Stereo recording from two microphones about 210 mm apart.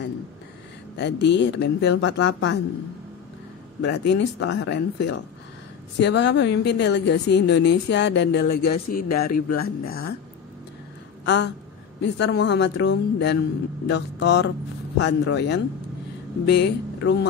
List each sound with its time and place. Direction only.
0.9 s a woman's voice: 55° left (ahead or behind)
3.8 s a woman's voice: 55° left (ahead or behind)
11.2 s a woman's voice: 55° left (ahead or behind)